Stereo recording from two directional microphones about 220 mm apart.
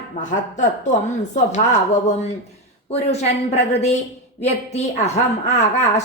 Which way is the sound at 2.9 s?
30° left (ahead or behind).